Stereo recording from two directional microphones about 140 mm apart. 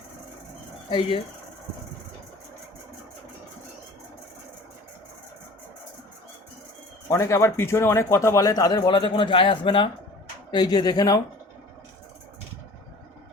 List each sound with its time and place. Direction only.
0.9 s speech: 35° left (ahead or behind)
7.1 s a man's voice: 20° left (ahead or behind)